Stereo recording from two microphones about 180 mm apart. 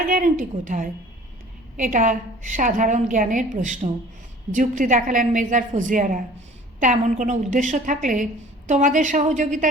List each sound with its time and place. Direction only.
0.1 s a woman's voice: 50° right (ahead or behind)